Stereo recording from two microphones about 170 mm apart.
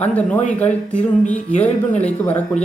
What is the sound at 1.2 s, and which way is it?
Music, 45° left (ahead or behind).